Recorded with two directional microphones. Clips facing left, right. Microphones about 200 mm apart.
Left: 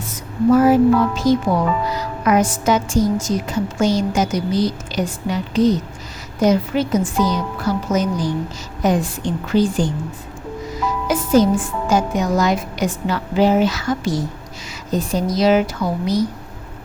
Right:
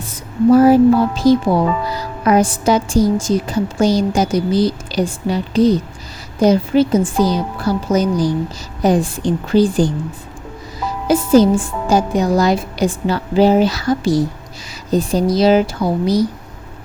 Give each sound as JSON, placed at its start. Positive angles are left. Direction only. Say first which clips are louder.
{"t": 0.1, "sound": "a woman's voice", "louder": "right 3 dB", "side_deg": -35}